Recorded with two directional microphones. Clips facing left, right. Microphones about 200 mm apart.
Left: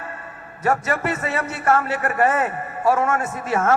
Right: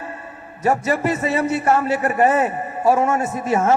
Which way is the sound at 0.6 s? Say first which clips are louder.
Right 3 dB; 20° right (ahead or behind).